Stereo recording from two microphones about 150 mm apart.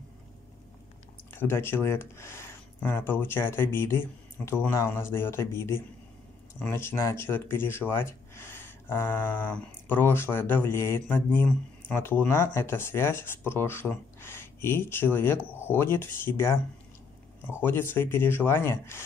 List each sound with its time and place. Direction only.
1.3 s speech: 15° left (ahead or behind)
17.6 s speech: 15° left (ahead or behind)